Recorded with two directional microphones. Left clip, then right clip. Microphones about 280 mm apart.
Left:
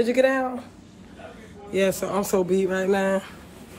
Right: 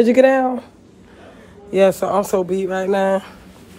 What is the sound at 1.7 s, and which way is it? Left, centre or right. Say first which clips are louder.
Speech: right 9 dB; centre.